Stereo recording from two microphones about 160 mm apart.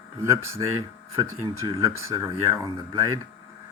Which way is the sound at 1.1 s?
30° right (ahead or behind).